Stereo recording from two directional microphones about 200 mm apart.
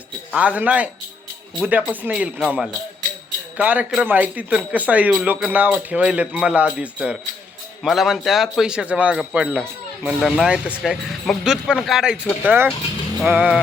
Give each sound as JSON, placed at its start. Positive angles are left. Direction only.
{"t": 0.3, "sound": "speech", "side_deg": -5}